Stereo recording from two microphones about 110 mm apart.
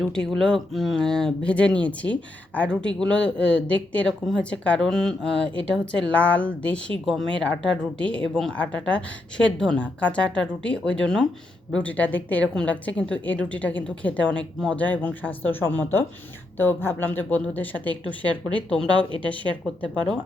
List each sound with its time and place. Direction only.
0.0 s a woman's voice: 5° left (ahead or behind)
18.9 s speech: 50° right (ahead or behind)